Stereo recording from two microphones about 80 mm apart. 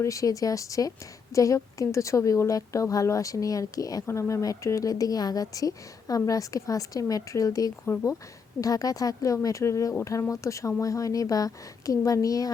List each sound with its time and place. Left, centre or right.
0.0 s a woman's voice: left
4.0 s a woman's voice: left
7.9 s speech: left
8.6 s a woman's voice: left